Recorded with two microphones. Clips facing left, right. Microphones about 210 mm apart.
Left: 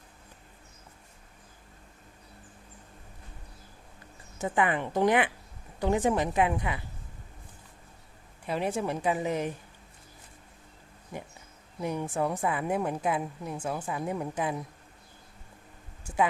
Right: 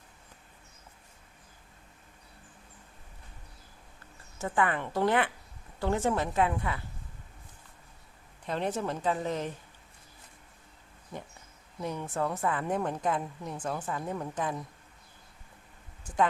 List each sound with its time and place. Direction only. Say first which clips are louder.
4.4 s a woman's voice: left 2 dB; 15° left (ahead or behind)
8.4 s a woman's voice: left 2 dB; 10° left (ahead or behind)
11.1 s a woman's voice: left 2 dB; 10° left (ahead or behind)